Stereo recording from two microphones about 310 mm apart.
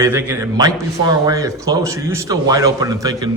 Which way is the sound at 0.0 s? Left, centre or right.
Centre.